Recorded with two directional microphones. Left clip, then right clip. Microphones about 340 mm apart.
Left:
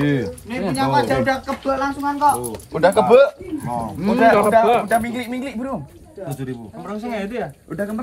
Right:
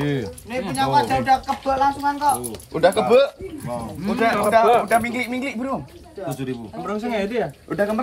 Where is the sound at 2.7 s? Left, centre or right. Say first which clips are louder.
Left 2 dB; left.